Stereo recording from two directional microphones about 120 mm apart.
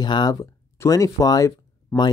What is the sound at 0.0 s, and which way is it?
Speech, 35° left (ahead or behind).